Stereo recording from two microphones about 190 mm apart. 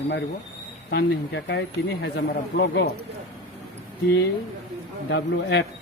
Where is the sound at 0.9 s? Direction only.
65° left (ahead or behind).